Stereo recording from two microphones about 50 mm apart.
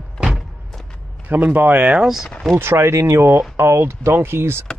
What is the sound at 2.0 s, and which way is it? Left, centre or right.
Speech, centre.